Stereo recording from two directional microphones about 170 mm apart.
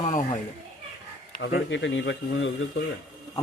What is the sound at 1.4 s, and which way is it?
Speech, 90° left.